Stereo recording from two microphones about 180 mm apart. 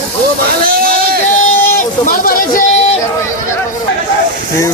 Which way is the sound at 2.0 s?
50° left (ahead or behind).